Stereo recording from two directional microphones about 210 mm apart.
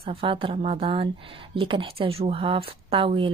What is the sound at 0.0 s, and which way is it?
A woman's voice, 25° right (ahead or behind).